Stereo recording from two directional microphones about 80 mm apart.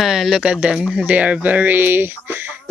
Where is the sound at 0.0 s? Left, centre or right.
Centre.